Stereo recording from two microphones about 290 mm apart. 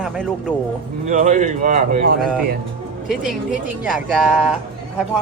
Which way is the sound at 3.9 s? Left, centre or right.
Centre.